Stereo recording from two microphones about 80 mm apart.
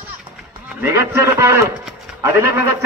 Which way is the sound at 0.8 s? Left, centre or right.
Right.